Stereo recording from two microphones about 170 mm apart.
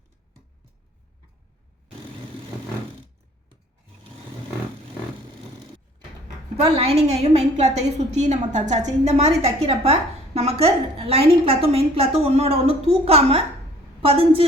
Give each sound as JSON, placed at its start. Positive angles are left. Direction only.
{"t": 6.6, "sound": "a woman's voice", "side_deg": -35}